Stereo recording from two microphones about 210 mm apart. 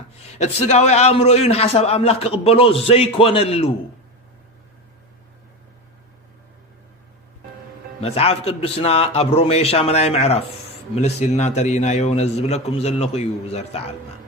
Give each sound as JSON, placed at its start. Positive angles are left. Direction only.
{"t": 0.3, "sound": "a man's voice", "side_deg": 30}
{"t": 8.0, "sound": "a man's voice", "side_deg": 30}